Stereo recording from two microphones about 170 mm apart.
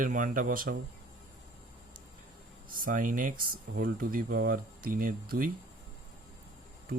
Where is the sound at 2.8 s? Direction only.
55° right (ahead or behind).